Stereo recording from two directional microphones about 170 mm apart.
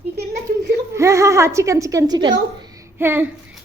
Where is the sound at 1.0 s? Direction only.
15° right (ahead or behind).